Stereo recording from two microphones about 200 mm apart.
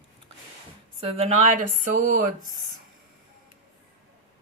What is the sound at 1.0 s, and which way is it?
Speech, 35° right (ahead or behind).